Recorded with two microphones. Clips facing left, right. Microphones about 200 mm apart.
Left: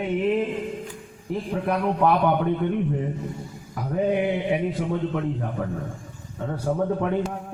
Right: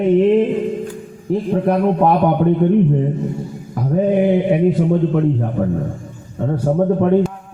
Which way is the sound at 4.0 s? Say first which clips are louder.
Right 8 dB; 40° right (ahead or behind).